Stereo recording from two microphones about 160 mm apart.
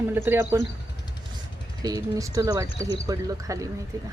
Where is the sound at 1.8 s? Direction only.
25° right (ahead or behind).